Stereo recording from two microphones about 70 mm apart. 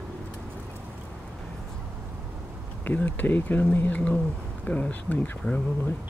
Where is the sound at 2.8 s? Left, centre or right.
Left.